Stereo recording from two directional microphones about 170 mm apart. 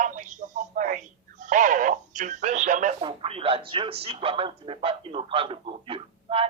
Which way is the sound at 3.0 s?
35° right (ahead or behind).